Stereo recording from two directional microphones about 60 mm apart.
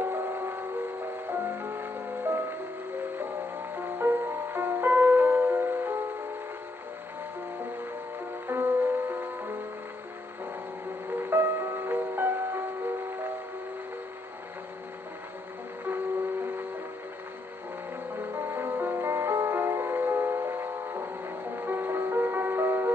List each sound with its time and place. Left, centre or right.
0.0 s music: right
1.6 s music: right
3.7 s music: right
8.5 s music: right
11.1 s music: right
18.3 s music: right